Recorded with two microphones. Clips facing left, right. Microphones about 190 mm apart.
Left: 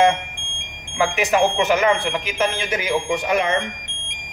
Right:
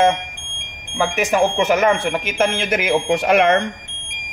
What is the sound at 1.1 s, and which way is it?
Speech, 45° right (ahead or behind).